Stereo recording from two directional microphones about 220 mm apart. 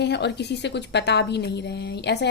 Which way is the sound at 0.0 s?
50° left (ahead or behind).